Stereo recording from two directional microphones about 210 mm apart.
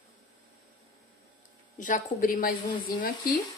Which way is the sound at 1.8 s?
40° left (ahead or behind).